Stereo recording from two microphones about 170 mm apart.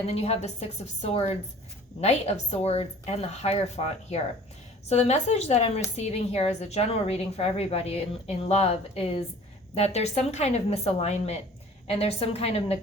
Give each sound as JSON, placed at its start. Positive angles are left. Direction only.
{"t": 0.1, "sound": "a woman's voice", "side_deg": 40}